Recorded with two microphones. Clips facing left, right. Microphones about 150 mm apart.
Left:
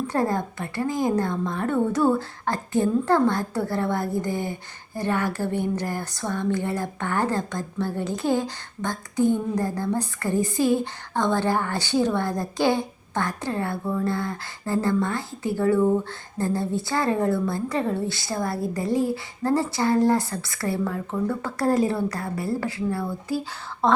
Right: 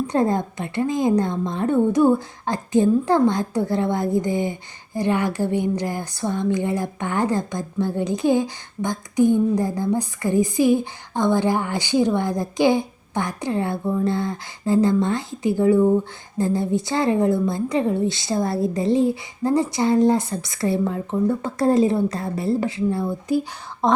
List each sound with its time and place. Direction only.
0.1 s a woman's voice: 20° right (ahead or behind)